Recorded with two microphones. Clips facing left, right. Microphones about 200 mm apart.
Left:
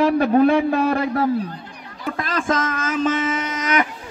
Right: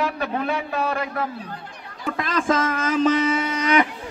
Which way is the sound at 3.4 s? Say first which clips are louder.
Right 2 dB; 30° right (ahead or behind).